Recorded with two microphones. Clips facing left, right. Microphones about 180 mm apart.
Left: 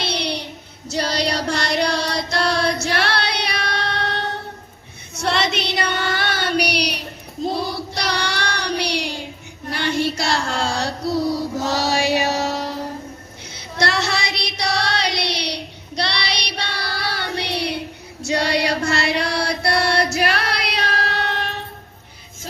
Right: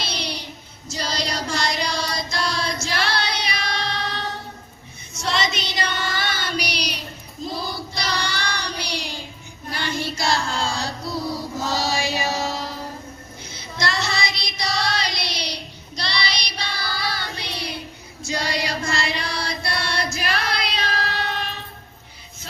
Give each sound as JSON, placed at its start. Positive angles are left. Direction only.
{"t": 0.0, "sound": "child singing", "side_deg": 65}